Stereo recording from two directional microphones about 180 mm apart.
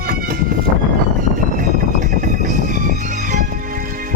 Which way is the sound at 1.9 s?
45° right (ahead or behind).